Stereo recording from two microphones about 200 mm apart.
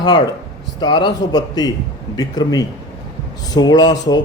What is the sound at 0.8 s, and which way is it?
Speech, 25° left (ahead or behind).